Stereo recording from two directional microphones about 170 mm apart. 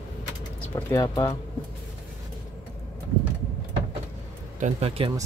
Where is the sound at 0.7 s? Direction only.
25° left (ahead or behind).